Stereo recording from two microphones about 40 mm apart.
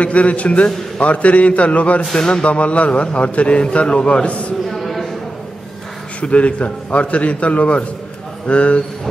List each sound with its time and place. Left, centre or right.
0.0 s a man's voice: left
2.1 s music: centre
2.4 s a man's voice: left
4.6 s a sound: centre
6.3 s a man's voice: left